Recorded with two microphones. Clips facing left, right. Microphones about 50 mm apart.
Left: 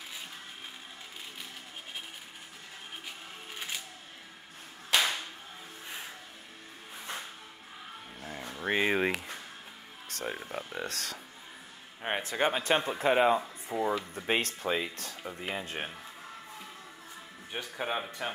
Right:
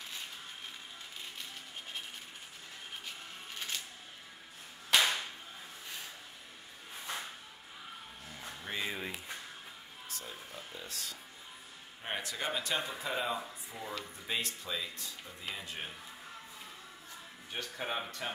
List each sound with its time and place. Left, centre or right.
3.5 s music: centre
4.9 s clapping: centre
8.2 s music: left
8.5 s speech: left
10.0 s speech: left
12.0 s speech: left
15.4 s speech: left
17.5 s speech: centre